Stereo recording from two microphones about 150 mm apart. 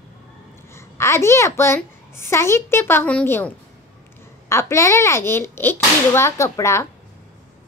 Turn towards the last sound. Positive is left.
turn(degrees=20)  # may be behind; listen again after turning